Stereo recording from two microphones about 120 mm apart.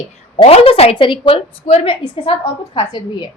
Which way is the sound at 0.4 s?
55° left (ahead or behind).